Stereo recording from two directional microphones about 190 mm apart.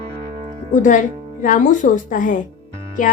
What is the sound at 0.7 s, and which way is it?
A woman's voice, 40° left (ahead or behind).